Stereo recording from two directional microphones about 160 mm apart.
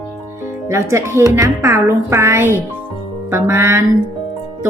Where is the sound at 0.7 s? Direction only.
15° right (ahead or behind).